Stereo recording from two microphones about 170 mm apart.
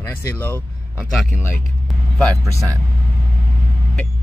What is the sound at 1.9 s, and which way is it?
Vehicle, centre (ahead or behind).